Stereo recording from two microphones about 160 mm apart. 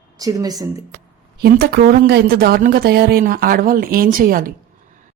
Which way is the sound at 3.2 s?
60° right (ahead or behind).